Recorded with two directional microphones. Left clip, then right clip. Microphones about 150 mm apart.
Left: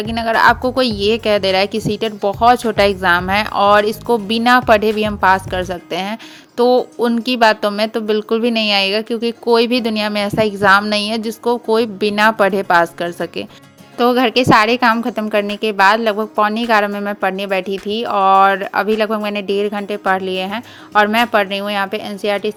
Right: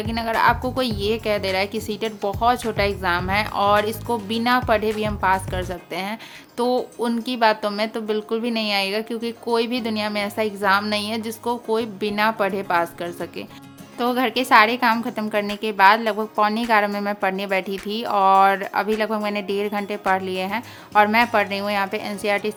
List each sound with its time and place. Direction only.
0.0 s speech: 35° left (ahead or behind)
14.9 s speech: 30° left (ahead or behind)